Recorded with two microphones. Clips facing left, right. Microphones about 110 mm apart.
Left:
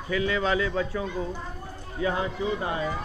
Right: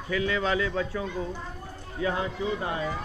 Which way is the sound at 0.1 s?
15° left (ahead or behind).